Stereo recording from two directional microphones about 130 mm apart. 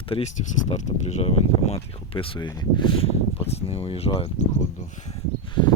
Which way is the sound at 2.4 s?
40° left (ahead or behind).